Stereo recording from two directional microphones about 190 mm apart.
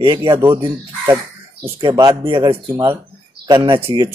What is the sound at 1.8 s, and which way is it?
Speech, 25° right (ahead or behind).